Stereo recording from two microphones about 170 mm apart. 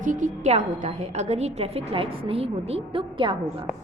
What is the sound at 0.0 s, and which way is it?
A woman's voice, 50° right (ahead or behind).